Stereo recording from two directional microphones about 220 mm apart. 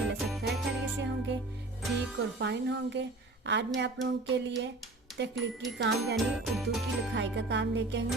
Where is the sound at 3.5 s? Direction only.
55° right (ahead or behind).